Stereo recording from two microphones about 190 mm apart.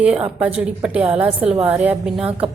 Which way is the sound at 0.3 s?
5° right (ahead or behind).